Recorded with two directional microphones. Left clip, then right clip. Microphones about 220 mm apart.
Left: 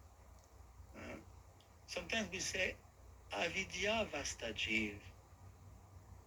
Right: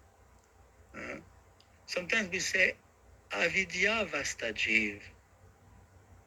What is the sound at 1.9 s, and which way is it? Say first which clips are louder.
A man's voice: right 10 dB; 35° right (ahead or behind).